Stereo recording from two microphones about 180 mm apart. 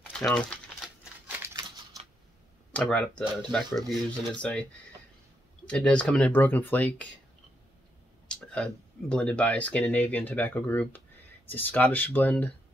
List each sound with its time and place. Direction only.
0.1 s crumpling: 5° left (ahead or behind)
1.2 s a sound: 15° right (ahead or behind)
2.7 s speech: 5° left (ahead or behind)
5.7 s speech: 5° left (ahead or behind)
8.3 s a sound: 5° left (ahead or behind)
9.1 s speech: 5° left (ahead or behind)